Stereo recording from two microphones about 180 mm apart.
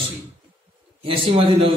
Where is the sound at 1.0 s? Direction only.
30° right (ahead or behind).